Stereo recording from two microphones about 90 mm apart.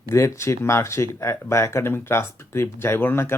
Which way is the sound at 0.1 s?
30° left (ahead or behind).